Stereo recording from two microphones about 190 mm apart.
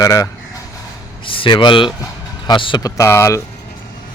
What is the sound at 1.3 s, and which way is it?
A man's voice, 25° left (ahead or behind).